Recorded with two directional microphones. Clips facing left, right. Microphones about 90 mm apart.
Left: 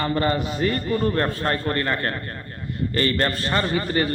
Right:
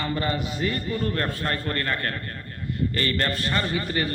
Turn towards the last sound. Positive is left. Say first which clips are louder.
# left 4 dB
turn(degrees=40)  # may be behind; listen again after turning